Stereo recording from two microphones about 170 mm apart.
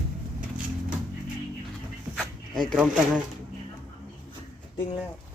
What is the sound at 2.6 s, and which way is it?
Speech, 5° right (ahead or behind).